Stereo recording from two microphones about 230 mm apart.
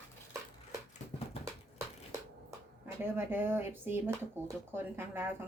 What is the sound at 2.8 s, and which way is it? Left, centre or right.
Speech, centre.